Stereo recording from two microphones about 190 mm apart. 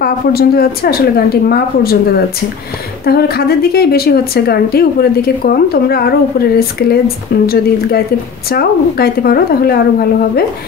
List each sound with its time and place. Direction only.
0.0 s a woman's voice: 55° left (ahead or behind)
3.1 s a woman's voice: 55° left (ahead or behind)